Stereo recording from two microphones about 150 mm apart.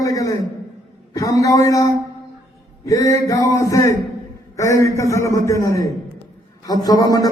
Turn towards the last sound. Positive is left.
turn(degrees=25)  # may be behind; listen again after turning